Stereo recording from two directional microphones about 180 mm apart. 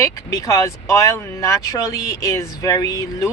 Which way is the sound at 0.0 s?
20° left (ahead or behind).